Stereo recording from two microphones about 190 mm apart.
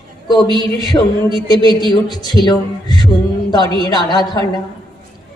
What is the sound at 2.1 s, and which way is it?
A man's voice, 20° left (ahead or behind).